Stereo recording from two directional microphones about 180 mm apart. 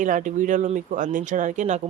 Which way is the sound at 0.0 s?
45° right (ahead or behind).